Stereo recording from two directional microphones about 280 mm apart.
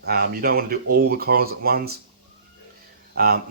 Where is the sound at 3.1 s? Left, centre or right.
Right.